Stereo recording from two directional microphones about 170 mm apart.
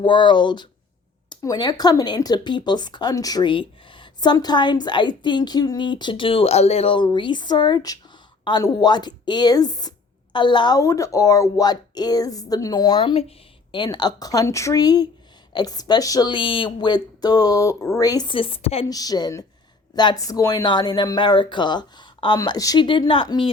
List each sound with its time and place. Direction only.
0.0 s speech: 25° left (ahead or behind)
18.9 s speech: 20° left (ahead or behind)